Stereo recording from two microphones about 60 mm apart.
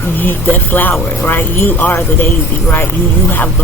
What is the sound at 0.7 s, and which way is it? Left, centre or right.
Speech, left.